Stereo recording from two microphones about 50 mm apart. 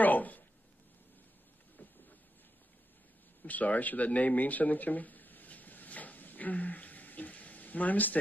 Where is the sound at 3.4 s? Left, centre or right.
Left.